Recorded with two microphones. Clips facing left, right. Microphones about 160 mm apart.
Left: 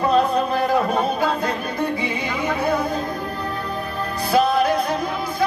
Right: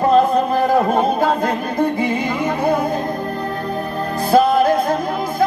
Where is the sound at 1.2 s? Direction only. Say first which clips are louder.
Right 4 dB; 50° right (ahead or behind).